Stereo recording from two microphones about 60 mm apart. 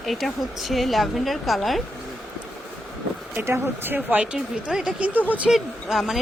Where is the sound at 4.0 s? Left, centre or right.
Centre.